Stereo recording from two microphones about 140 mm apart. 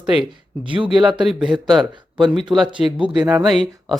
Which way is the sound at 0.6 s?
40° right (ahead or behind).